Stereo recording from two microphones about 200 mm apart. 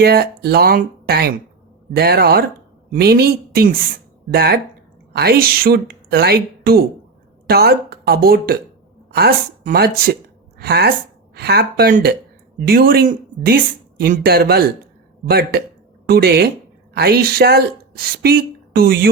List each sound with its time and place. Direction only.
0.0 s a woman's voice: 50° right (ahead or behind)